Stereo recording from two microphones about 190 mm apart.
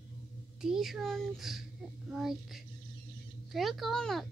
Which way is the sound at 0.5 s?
Centre (ahead or behind).